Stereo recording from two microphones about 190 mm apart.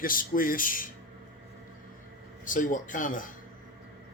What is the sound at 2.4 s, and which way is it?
Speech, 45° left (ahead or behind).